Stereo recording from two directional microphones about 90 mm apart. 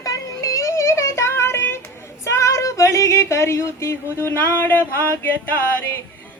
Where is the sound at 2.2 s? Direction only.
35° left (ahead or behind).